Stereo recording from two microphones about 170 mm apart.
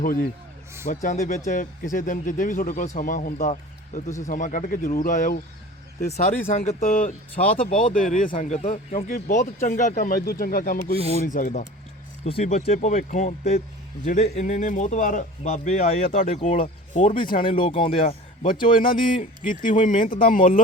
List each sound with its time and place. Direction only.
0.0 s a man's voice: 55° left (ahead or behind)
6.5 s a man's voice: 40° left (ahead or behind); by 10.9 s 60° left (ahead or behind)
10.9 s a man's voice: 35° right (ahead or behind)
11.3 s a man's voice: 50° left (ahead or behind)
12.2 s a man's voice: 40° left (ahead or behind)
16.4 s speech: 35° left (ahead or behind)
18.7 s a man's voice: 55° left (ahead or behind)